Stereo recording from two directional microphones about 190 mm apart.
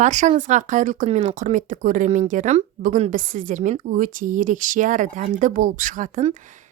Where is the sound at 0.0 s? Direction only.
40° right (ahead or behind).